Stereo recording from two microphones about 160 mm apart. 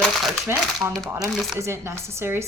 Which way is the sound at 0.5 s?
15° right (ahead or behind).